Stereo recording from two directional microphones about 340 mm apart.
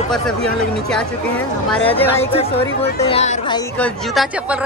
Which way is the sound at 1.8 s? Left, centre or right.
Centre.